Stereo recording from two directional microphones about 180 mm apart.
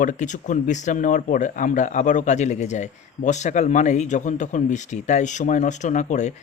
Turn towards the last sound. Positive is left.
turn(degrees=40)  # may be behind; listen again after turning